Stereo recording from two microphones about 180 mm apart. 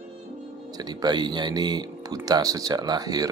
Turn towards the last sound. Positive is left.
turn(degrees=-20)  # may be behind; listen again after turning